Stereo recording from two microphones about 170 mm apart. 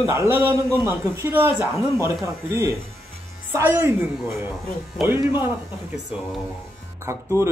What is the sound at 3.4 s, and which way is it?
Speech, 10° right (ahead or behind).